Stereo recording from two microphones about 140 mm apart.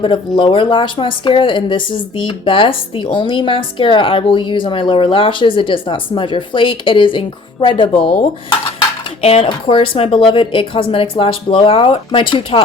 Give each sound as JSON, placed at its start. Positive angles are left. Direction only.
{"t": 0.0, "sound": "speech", "side_deg": 35}
{"t": 9.2, "sound": "speech", "side_deg": 45}